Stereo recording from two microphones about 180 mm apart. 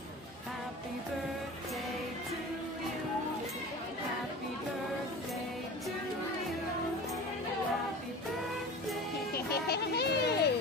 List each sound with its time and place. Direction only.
9.3 s music: 60° left (ahead or behind)